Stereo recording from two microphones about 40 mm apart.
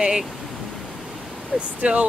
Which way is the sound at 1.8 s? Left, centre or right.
Right.